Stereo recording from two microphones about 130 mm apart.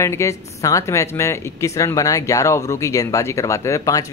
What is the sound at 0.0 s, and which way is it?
Speech, 20° left (ahead or behind).